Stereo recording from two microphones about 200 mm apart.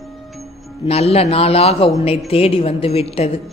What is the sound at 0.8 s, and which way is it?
Speech, 30° left (ahead or behind).